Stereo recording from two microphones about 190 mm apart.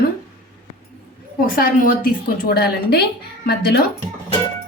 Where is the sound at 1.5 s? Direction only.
50° left (ahead or behind).